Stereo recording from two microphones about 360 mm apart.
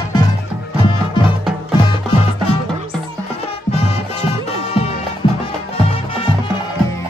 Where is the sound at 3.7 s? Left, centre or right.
Centre.